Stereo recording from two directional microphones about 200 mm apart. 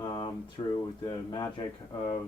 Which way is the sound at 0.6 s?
25° left (ahead or behind).